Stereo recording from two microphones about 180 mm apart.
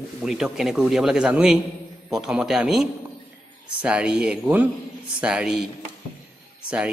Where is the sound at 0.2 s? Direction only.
5° right (ahead or behind).